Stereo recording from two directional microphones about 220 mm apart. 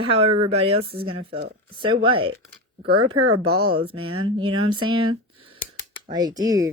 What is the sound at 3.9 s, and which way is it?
Speech, 80° right.